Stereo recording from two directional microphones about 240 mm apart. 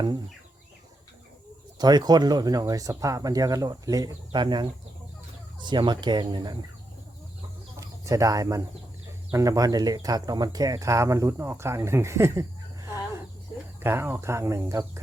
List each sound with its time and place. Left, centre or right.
1.8 s speech: centre
7.8 s speech: centre